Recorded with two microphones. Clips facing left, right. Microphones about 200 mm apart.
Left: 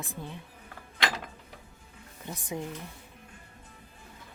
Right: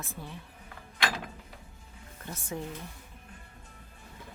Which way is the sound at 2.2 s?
15° left (ahead or behind).